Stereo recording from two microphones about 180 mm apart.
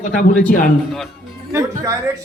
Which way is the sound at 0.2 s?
50° left (ahead or behind).